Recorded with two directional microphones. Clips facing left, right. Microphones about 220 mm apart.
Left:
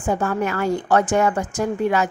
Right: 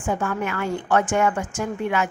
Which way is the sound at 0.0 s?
35° left (ahead or behind).